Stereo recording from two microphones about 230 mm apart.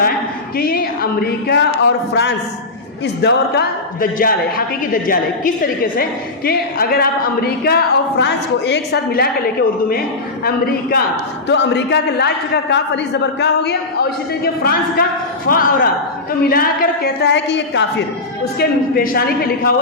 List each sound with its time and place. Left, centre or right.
0.5 s a woman's voice: left
13.4 s a woman's voice: left